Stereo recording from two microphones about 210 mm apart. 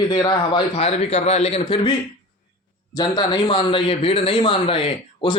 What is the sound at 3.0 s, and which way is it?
A man's voice, 20° left (ahead or behind).